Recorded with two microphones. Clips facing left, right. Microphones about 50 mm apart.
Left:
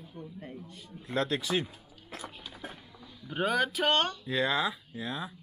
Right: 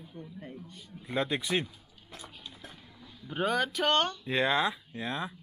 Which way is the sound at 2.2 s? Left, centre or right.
Centre.